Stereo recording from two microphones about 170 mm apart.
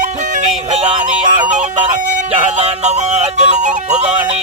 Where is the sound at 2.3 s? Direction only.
40° right (ahead or behind).